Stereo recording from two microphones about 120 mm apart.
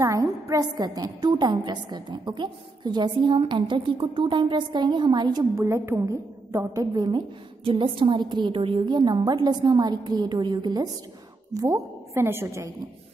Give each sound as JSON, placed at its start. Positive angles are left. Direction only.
{"t": 0.0, "sound": "a woman's voice", "side_deg": -25}
{"t": 5.6, "sound": "a woman's voice", "side_deg": -20}